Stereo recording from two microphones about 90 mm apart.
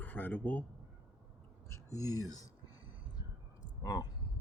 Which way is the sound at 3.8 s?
50° left (ahead or behind).